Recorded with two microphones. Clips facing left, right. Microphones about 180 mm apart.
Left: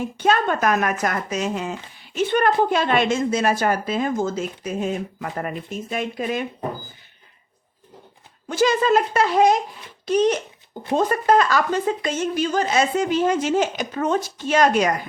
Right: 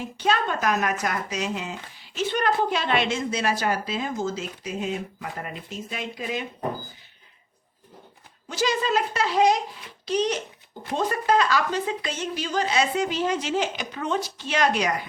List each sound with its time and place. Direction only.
0.0 s a woman's voice: 50° left (ahead or behind)
8.4 s a woman's voice: 50° left (ahead or behind)